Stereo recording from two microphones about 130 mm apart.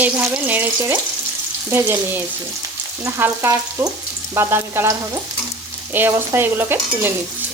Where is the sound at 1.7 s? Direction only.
20° right (ahead or behind).